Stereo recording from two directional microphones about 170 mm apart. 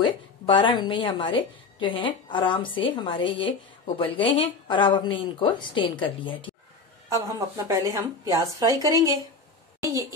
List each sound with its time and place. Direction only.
0.0 s a woman's voice: 30° left (ahead or behind)
7.1 s a woman's voice: 20° right (ahead or behind)